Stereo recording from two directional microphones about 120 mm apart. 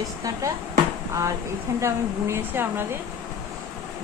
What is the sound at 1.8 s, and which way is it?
Speech, 25° right (ahead or behind).